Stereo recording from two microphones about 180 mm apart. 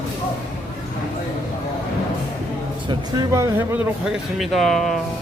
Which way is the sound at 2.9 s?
15° right (ahead or behind).